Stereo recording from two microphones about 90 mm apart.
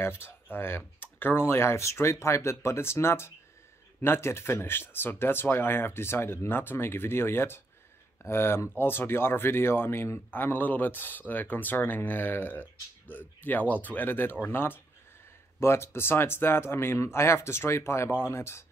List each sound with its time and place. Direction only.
0.0 s speech: 25° left (ahead or behind)